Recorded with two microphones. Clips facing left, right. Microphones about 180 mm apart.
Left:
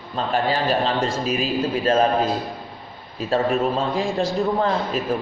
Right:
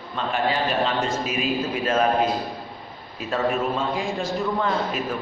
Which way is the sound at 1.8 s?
30° left (ahead or behind).